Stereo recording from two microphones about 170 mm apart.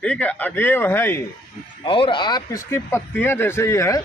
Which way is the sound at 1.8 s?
30° left (ahead or behind).